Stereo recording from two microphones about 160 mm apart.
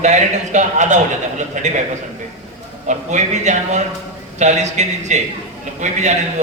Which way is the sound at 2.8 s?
50° right (ahead or behind).